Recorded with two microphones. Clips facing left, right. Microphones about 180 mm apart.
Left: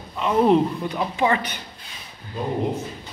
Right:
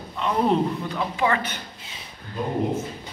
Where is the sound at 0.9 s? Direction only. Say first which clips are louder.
Left 2 dB; 20° left (ahead or behind).